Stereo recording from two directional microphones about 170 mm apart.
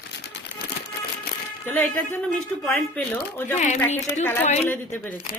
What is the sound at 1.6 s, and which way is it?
A woman's voice, 10° left (ahead or behind).